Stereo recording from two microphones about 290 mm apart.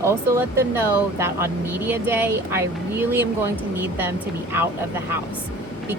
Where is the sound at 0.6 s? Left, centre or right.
Centre.